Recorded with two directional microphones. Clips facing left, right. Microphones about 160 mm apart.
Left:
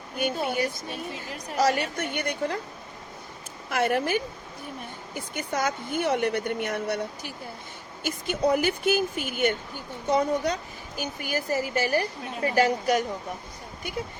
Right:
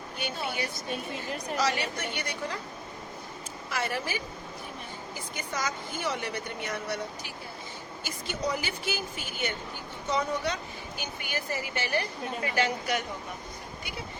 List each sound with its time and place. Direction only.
0.2 s speech: 50° left (ahead or behind)
0.9 s speech: centre (ahead or behind)
1.5 s speech: 50° left (ahead or behind)
3.7 s a woman's voice: 55° left (ahead or behind)